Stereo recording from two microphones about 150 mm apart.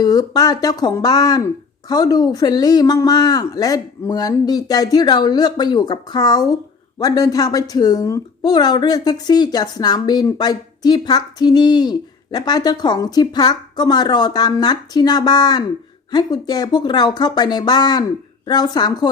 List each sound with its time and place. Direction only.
0.0 s speech: 25° left (ahead or behind)